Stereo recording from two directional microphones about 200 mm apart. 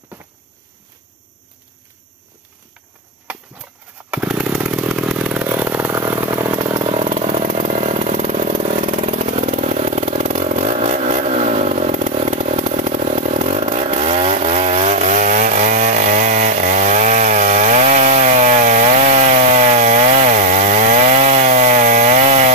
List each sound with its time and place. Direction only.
4.1 s motorcycle: 5° right (ahead or behind); by 22.5 s 35° right (ahead or behind)